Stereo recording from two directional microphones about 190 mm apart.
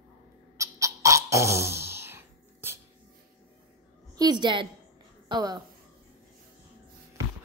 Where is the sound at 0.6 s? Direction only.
15° right (ahead or behind).